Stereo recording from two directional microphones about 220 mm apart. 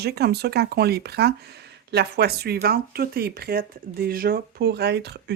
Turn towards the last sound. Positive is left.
turn(degrees=-50)  # may be behind; listen again after turning